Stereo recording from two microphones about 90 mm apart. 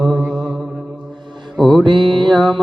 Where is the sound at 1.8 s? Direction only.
60° right (ahead or behind).